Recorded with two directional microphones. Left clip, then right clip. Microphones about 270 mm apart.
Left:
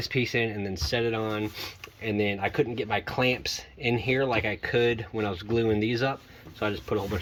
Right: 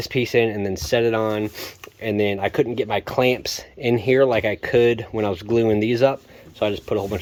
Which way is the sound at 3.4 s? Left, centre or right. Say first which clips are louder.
Right 5 dB; centre.